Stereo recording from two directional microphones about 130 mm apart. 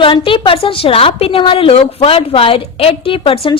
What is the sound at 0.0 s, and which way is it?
A woman's voice, 45° left (ahead or behind).